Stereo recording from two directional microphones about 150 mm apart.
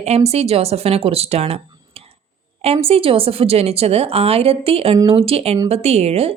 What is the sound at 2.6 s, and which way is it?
A woman's voice, 40° right (ahead or behind).